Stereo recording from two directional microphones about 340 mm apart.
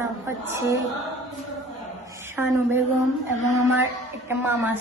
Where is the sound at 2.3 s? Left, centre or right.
Centre.